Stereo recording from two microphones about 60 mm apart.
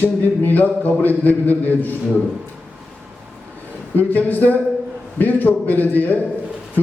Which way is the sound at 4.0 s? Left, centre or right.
Left.